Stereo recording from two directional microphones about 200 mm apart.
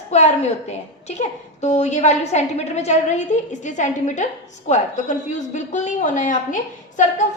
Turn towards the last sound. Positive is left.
turn(degrees=40)  # may be behind; listen again after turning